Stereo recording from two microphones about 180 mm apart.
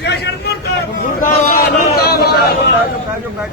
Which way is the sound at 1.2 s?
50° left (ahead or behind).